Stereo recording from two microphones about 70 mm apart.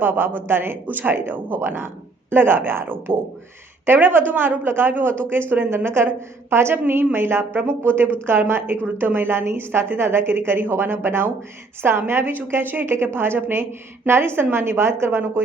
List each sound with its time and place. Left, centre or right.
0.0 s a woman's voice: right